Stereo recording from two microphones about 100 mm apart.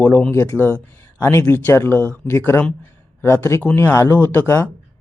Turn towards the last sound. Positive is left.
turn(degrees=20)  # may be behind; listen again after turning